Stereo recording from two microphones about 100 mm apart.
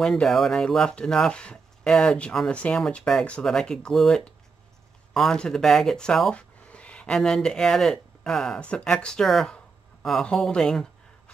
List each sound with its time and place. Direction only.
0.0 s speech: 5° left (ahead or behind)